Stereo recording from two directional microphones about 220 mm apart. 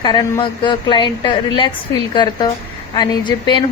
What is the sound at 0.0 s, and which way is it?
A woman's voice, 20° left (ahead or behind).